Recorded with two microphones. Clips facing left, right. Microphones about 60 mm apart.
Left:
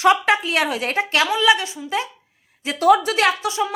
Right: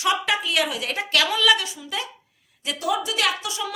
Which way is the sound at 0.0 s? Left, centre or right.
Left.